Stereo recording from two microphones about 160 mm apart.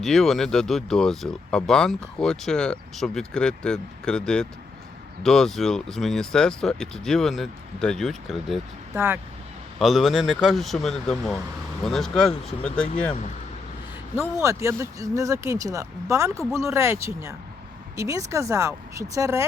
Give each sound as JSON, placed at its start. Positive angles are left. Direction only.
{"t": 0.0, "sound": "speech", "side_deg": 0}
{"t": 9.0, "sound": "speech", "side_deg": -15}
{"t": 9.7, "sound": "speech", "side_deg": 0}
{"t": 14.4, "sound": "speech", "side_deg": -15}